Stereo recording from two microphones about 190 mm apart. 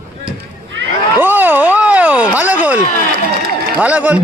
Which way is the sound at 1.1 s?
10° right (ahead or behind).